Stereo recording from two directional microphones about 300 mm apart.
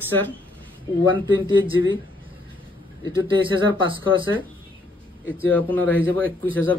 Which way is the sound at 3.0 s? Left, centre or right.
Centre.